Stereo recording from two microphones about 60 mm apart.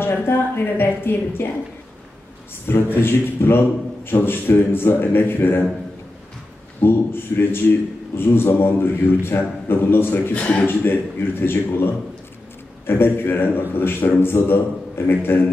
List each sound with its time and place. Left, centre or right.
0.0 s a man's voice: left
2.7 s a man's voice: left
6.8 s a man's voice: left